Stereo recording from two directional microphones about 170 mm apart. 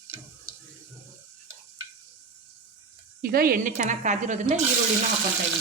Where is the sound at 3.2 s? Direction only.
60° right (ahead or behind); by 4.6 s 45° right (ahead or behind).